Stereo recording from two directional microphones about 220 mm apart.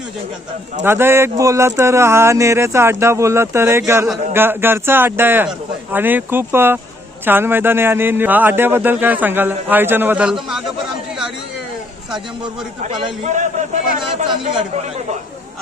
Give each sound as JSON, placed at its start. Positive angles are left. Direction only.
{"t": 0.9, "sound": "a man's voice", "side_deg": -10}
{"t": 12.8, "sound": "a man's voice", "side_deg": -30}